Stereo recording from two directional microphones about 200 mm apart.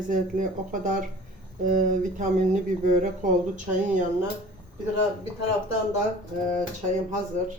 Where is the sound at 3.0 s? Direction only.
40° right (ahead or behind).